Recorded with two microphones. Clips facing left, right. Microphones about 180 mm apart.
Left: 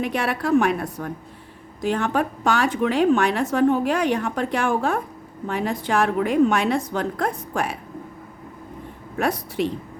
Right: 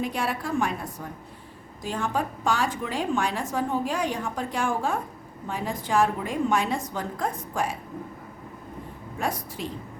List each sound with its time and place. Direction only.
0.0 s a woman's voice: 70° left (ahead or behind)
9.1 s a woman's voice: 70° left (ahead or behind)